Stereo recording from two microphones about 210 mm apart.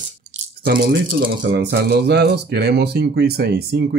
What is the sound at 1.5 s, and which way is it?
Speech, 50° right (ahead or behind).